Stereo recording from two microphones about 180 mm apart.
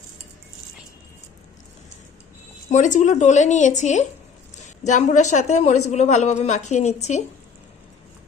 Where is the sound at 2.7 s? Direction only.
45° left (ahead or behind).